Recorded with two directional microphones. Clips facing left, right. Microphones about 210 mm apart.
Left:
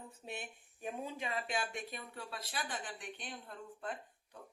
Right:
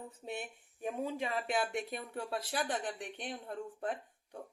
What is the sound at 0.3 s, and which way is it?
Speech, 50° right (ahead or behind).